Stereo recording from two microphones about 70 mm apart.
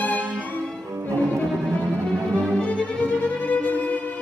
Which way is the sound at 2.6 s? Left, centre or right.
Centre.